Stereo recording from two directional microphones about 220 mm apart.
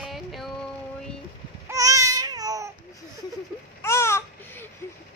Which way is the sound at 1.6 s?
15° right (ahead or behind).